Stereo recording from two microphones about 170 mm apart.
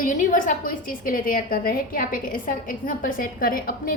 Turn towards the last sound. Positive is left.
turn(degrees=60)  # may be behind; listen again after turning